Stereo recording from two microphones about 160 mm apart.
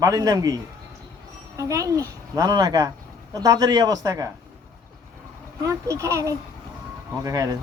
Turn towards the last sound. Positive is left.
turn(degrees=-20)  # may be behind; listen again after turning